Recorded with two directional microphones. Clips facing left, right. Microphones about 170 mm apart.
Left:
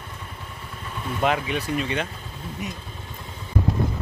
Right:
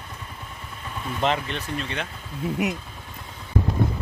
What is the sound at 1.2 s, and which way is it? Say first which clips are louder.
Speech: left 2 dB; 5° left (ahead or behind).